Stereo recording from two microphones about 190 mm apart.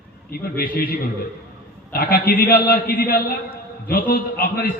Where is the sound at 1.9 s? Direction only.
55° left (ahead or behind).